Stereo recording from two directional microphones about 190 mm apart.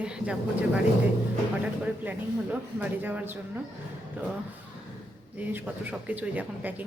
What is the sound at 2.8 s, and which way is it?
Speech, 10° right (ahead or behind).